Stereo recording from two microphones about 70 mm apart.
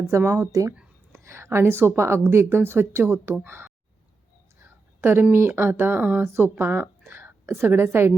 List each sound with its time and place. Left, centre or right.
0.1 s a woman's voice: right
4.6 s whispering: right
5.3 s a woman's voice: right